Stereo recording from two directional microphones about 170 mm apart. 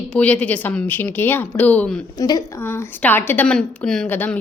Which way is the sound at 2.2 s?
20° left (ahead or behind).